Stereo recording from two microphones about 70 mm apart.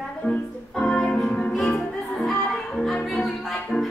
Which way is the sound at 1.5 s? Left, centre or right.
Centre.